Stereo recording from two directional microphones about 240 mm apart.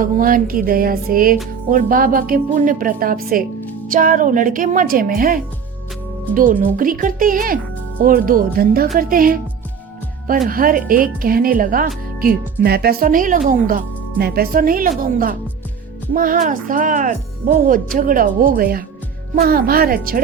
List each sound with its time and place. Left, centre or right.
0.0 s speech: right
10.5 s speech: right